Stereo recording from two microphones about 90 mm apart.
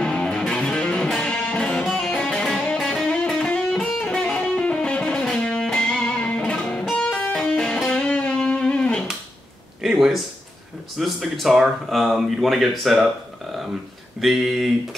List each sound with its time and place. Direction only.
0.0 s music: 10° left (ahead or behind)
9.8 s a sound: 5° right (ahead or behind)
11.0 s speech: centre (ahead or behind)
14.2 s speech: centre (ahead or behind)